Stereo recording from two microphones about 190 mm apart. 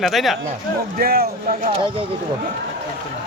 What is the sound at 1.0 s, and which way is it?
Speech, 50° right (ahead or behind).